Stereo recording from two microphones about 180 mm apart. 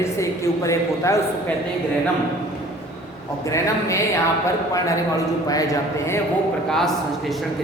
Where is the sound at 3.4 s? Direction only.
15° left (ahead or behind).